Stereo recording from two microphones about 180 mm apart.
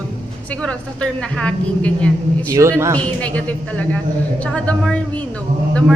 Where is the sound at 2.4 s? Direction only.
20° right (ahead or behind).